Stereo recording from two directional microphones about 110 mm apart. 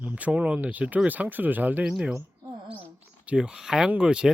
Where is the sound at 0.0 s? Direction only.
15° right (ahead or behind).